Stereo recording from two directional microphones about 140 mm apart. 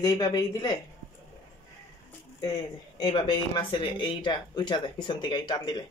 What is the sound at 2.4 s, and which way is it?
Speech, 25° left (ahead or behind).